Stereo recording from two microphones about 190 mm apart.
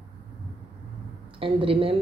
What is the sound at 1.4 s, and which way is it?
Speech, 30° right (ahead or behind).